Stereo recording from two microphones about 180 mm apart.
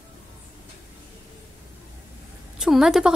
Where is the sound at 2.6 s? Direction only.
Centre (ahead or behind).